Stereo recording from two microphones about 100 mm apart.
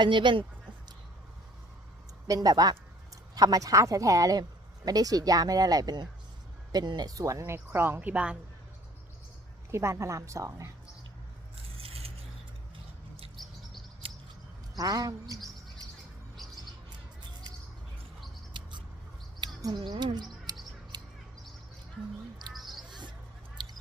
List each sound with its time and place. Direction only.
0.0 s speech: 55° right (ahead or behind)
2.2 s speech: 40° right (ahead or behind); by 8.4 s 10° right (ahead or behind)
9.7 s speech: 25° right (ahead or behind)
11.8 s a sound: 80° right
13.3 s chirp: centre (ahead or behind)
14.0 s chirp: 70° right (ahead or behind)
14.8 s speech: 40° right (ahead or behind)
18.5 s a sound: 50° right (ahead or behind)
19.7 s speech: 50° right (ahead or behind)
20.5 s a sound: 40° right (ahead or behind)
22.5 s owl: centre (ahead or behind)
22.9 s a sound: 50° right (ahead or behind)
23.6 s squish: 50° right (ahead or behind)